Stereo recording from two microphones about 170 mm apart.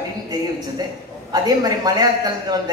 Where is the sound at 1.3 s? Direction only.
20° right (ahead or behind).